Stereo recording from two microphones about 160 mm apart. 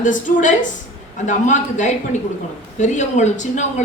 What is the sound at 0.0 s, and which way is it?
A man's voice, 55° left (ahead or behind).